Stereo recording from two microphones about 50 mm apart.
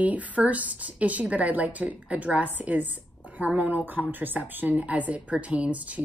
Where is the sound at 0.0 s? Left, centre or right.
Right.